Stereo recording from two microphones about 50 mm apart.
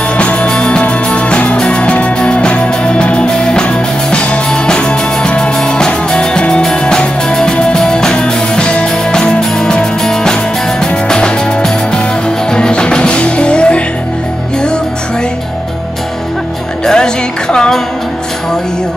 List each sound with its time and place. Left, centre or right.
0.2 s music: left
10.8 s music: centre
16.8 s music: centre